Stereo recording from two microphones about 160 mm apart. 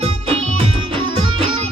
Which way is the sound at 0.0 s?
35° right (ahead or behind).